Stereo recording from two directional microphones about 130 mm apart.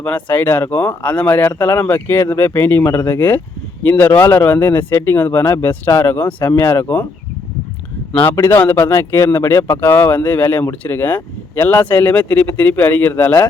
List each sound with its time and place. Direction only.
0.0 s speech: 15° left (ahead or behind)
8.1 s speech: 15° left (ahead or behind)